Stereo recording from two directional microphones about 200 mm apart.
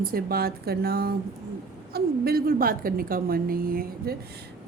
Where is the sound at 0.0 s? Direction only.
50° right (ahead or behind).